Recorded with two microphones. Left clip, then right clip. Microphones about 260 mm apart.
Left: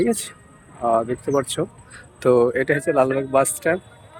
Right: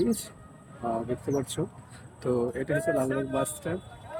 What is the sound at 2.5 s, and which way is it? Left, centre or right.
Speech, left.